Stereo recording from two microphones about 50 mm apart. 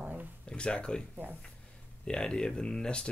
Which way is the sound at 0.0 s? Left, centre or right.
Right.